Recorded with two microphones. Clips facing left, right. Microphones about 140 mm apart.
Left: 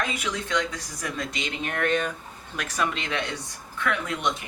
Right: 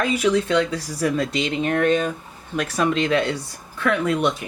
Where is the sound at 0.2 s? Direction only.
30° right (ahead or behind).